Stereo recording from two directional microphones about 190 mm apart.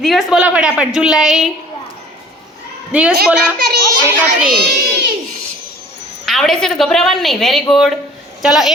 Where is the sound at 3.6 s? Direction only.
55° right (ahead or behind).